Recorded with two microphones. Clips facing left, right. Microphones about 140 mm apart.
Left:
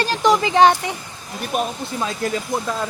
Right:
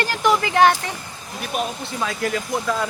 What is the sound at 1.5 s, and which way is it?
Speech, 45° left (ahead or behind).